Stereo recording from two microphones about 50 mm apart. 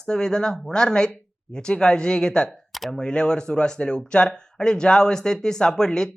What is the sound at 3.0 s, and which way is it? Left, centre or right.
Speech, centre.